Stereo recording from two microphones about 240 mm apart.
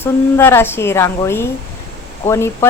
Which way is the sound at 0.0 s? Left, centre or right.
Centre.